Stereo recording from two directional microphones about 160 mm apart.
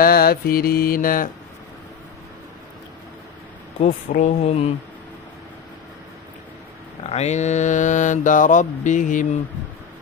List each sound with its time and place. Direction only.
0.0 s mantra: 70° left (ahead or behind)
3.8 s mantra: 45° left (ahead or behind)
7.0 s mantra: 40° left (ahead or behind)